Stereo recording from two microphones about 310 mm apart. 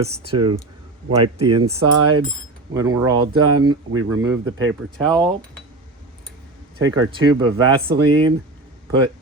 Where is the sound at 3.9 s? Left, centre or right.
Right.